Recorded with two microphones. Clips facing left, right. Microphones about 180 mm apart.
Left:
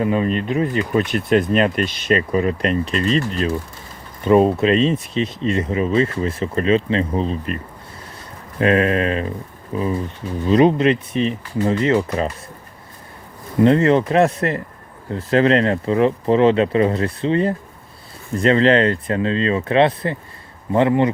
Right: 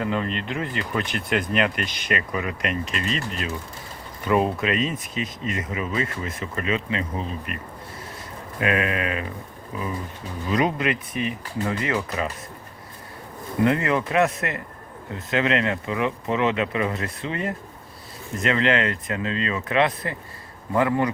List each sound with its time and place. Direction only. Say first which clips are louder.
0.0 s speech: left 7 dB; 15° left (ahead or behind); by 12.3 s 30° left (ahead or behind)
13.7 s speech: left 8 dB; 30° left (ahead or behind)